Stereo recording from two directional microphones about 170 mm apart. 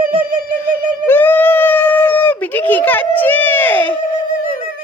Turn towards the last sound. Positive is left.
turn(degrees=10)  # may be behind; listen again after turning